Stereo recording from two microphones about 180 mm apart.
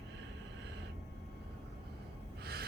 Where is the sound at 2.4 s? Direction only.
60° right (ahead or behind).